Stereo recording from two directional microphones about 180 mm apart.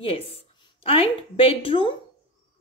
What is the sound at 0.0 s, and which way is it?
A woman's voice, 30° left (ahead or behind).